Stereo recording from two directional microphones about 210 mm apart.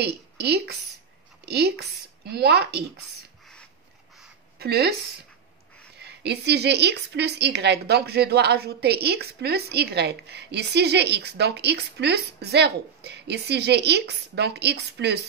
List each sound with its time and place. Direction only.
0.4 s a woman's voice: 50° right (ahead or behind)
4.6 s speech: 50° right (ahead or behind)
5.9 s a woman's voice: 50° right (ahead or behind)